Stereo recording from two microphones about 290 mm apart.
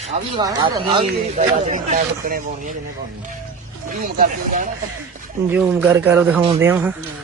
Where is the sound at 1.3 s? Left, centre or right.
Right.